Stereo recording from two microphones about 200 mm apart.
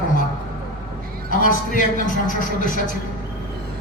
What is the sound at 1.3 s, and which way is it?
Speech, 40° left (ahead or behind).